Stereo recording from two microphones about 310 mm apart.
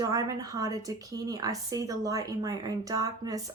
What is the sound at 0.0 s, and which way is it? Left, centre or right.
A woman's voice, centre.